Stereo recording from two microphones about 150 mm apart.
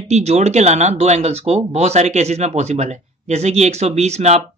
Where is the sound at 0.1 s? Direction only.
50° right (ahead or behind).